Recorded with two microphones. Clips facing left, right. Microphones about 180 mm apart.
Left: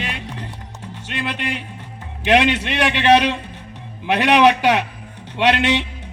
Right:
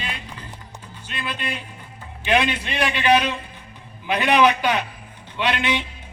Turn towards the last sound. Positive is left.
turn(degrees=70)  # may be behind; listen again after turning